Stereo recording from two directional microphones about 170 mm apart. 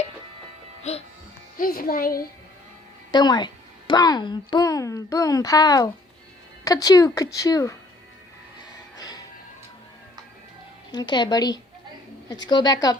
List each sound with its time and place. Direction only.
0.8 s speech: 40° left (ahead or behind)
1.5 s speech: 55° left (ahead or behind)
3.1 s speech: 25° left (ahead or behind)
9.0 s music: 20° left (ahead or behind)
10.9 s speech: 25° left (ahead or behind)